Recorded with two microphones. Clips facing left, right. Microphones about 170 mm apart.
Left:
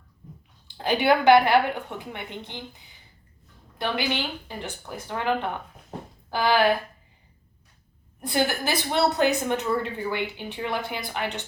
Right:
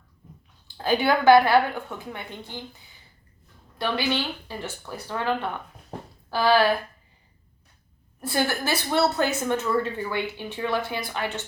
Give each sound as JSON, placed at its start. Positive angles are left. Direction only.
{"t": 0.8, "sound": "a woman's voice", "side_deg": 20}
{"t": 3.8, "sound": "a woman's voice", "side_deg": 20}
{"t": 8.2, "sound": "a woman's voice", "side_deg": 20}